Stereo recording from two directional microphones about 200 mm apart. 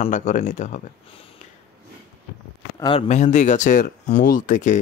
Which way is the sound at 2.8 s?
30° left (ahead or behind).